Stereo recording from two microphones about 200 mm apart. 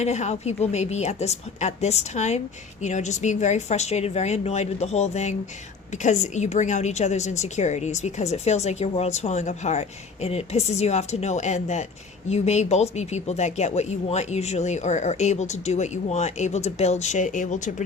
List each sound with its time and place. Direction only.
0.0 s a woman's voice: 35° left (ahead or behind)